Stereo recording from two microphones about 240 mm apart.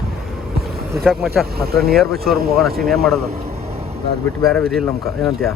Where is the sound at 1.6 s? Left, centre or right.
Right.